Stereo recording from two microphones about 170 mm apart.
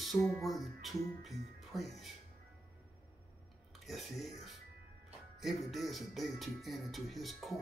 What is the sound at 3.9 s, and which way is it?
Speech, centre (ahead or behind).